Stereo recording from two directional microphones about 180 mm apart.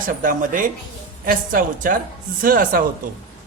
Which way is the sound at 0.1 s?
50° right (ahead or behind).